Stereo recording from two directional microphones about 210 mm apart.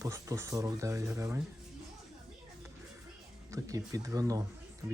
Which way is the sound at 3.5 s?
15° right (ahead or behind).